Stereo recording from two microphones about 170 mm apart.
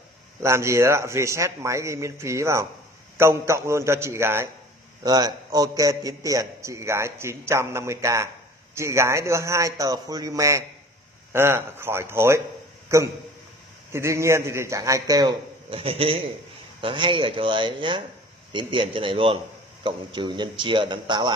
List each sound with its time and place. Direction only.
0.4 s a man's voice: 15° right (ahead or behind)